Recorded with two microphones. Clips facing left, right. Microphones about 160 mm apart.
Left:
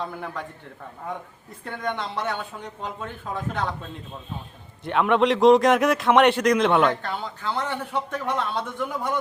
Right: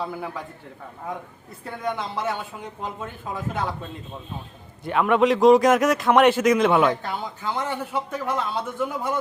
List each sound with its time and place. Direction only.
0.0 s speech: 5° right (ahead or behind)
1.6 s speech: 5° right (ahead or behind)
4.9 s a man's voice: 5° right (ahead or behind)